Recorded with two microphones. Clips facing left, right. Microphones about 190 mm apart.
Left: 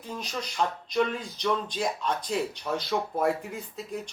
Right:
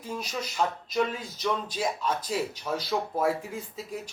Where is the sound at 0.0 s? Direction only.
10° right (ahead or behind).